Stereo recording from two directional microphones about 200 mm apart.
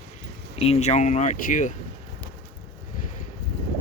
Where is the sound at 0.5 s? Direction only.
30° left (ahead or behind).